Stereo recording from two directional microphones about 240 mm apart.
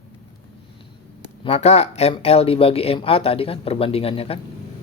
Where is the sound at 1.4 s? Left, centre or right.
Left.